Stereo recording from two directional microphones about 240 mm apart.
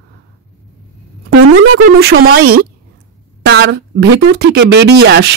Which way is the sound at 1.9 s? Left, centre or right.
Right.